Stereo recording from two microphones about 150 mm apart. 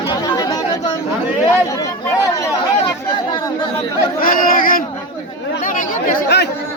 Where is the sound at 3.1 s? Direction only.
30° left (ahead or behind).